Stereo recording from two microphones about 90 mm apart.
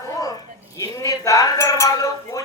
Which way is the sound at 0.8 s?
40° left (ahead or behind).